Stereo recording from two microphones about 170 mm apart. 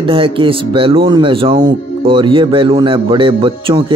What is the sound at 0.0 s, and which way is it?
Speech, 30° right (ahead or behind).